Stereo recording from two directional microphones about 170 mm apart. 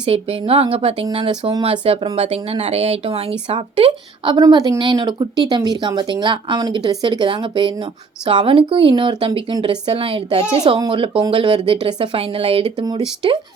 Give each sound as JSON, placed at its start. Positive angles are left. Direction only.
{"t": 0.0, "sound": "speech", "side_deg": -35}